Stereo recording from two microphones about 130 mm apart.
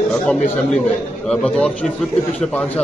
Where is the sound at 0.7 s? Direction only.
5° left (ahead or behind).